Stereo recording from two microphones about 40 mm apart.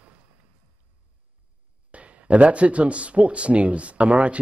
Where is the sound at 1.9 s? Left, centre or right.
Right.